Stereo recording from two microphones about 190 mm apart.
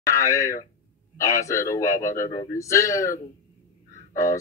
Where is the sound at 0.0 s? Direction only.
15° left (ahead or behind).